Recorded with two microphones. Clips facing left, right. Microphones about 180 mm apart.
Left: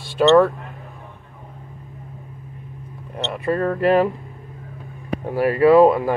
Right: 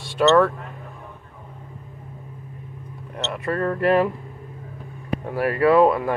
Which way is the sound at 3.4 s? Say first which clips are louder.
Left 2 dB; 25° left (ahead or behind).